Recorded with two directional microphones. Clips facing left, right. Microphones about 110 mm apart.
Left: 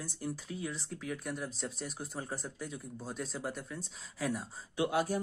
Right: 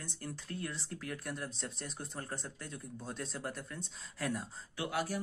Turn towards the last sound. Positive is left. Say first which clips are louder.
# left 5 dB
turn(degrees=25)  # may be behind; listen again after turning